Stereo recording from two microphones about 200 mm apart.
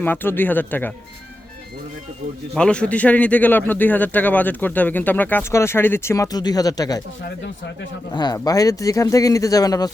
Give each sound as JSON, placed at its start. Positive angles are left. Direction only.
{"t": 0.0, "sound": "speech", "side_deg": 10}
{"t": 2.6, "sound": "speech", "side_deg": 5}
{"t": 8.1, "sound": "speech", "side_deg": 20}